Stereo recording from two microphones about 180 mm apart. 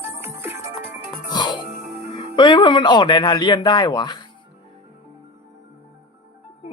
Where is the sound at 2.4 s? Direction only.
25° left (ahead or behind).